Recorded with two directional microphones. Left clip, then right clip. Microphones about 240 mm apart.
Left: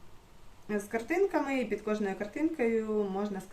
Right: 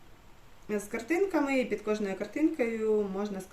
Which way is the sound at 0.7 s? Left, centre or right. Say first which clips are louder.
Right 1 dB; centre.